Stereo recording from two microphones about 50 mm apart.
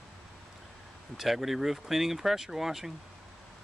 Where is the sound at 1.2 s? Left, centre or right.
Centre.